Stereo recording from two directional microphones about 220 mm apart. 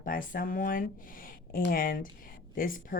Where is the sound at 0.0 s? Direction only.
40° left (ahead or behind).